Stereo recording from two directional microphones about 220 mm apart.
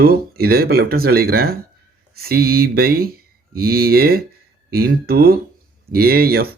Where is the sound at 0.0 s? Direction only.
45° right (ahead or behind).